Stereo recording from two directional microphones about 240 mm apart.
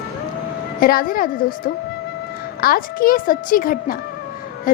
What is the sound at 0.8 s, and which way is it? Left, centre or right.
A woman's voice, left.